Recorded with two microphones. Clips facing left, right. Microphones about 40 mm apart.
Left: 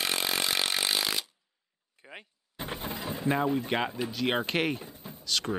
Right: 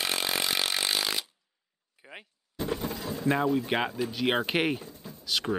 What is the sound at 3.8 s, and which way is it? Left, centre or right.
Speech, centre.